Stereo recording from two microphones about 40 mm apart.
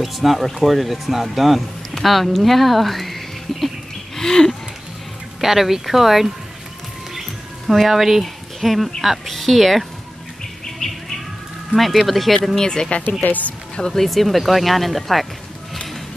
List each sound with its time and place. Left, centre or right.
0.0 s speech: centre
4.2 s a sound: centre
5.4 s speech: centre
7.2 s bird: centre
9.0 s speech: centre
10.8 s bird: centre
11.7 s speech: centre
12.5 s speech: centre
13.2 s speech: left
13.9 s speech: centre